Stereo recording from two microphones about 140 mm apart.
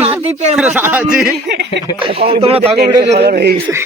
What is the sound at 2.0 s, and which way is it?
Speech, 45° right (ahead or behind).